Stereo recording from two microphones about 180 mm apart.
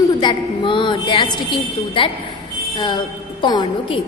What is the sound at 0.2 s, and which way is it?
A woman's voice, 25° left (ahead or behind).